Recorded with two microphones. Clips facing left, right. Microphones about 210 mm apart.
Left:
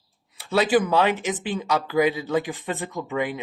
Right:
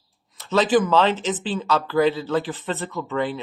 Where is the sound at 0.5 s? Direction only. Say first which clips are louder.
Right 2 dB; 10° left (ahead or behind).